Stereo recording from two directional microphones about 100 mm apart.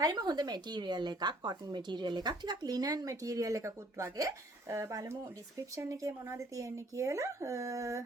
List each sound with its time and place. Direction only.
0.0 s speech: 40° right (ahead or behind)